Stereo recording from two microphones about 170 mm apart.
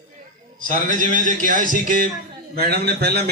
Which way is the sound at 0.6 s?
50° right (ahead or behind).